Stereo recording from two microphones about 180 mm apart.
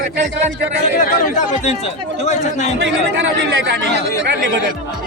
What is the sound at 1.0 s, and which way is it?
A man's voice, 45° left (ahead or behind).